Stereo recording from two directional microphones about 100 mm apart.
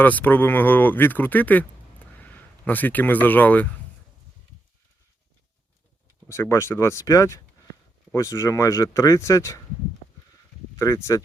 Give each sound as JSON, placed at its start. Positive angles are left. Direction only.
{"t": 0.0, "sound": "speech", "side_deg": 15}
{"t": 6.2, "sound": "speech", "side_deg": 25}
{"t": 10.8, "sound": "speech", "side_deg": 30}